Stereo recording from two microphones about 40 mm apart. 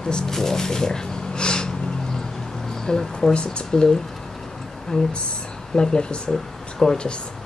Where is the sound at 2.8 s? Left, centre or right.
Centre.